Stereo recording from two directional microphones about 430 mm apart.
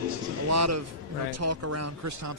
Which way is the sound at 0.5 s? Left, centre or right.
Right.